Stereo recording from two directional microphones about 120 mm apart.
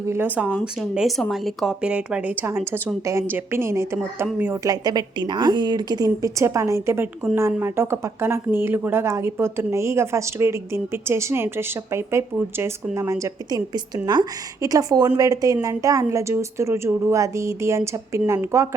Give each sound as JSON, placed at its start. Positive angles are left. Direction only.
{"t": 0.1, "sound": "speech", "side_deg": -15}
{"t": 4.6, "sound": "a woman's voice", "side_deg": -35}